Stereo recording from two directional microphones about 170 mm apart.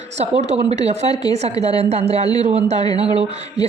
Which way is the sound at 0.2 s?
40° right (ahead or behind).